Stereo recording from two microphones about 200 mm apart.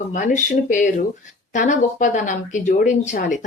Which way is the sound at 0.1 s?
40° left (ahead or behind).